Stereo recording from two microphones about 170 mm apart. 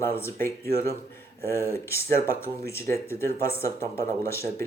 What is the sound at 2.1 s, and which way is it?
Speech, 15° left (ahead or behind).